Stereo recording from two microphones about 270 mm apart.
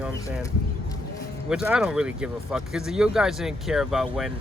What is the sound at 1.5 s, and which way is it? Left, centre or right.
Speech, centre.